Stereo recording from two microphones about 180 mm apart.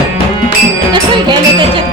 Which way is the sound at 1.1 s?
25° right (ahead or behind).